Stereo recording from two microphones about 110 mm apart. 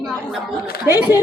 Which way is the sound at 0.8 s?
30° left (ahead or behind).